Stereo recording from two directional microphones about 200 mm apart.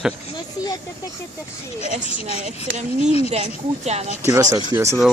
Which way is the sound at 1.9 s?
40° right (ahead or behind).